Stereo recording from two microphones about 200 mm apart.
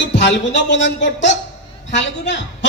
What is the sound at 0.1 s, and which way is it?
A man's voice, 60° left (ahead or behind).